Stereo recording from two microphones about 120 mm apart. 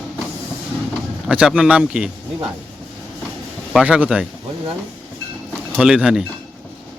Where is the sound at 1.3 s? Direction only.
10° right (ahead or behind).